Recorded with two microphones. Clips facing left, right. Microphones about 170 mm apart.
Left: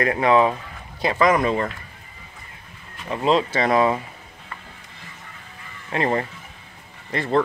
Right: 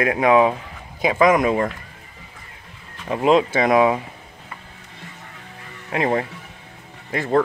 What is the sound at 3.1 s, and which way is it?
Speech, 15° right (ahead or behind).